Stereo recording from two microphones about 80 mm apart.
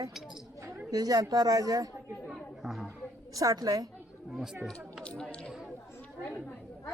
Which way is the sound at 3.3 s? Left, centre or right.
Right.